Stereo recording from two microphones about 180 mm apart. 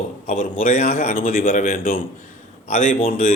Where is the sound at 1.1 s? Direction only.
50° left (ahead or behind).